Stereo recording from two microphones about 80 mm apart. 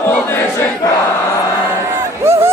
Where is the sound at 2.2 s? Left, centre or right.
Right.